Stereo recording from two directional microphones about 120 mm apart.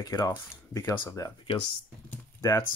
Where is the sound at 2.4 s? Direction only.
25° left (ahead or behind).